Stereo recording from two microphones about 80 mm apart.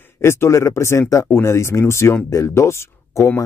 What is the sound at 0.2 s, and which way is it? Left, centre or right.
Speech, left.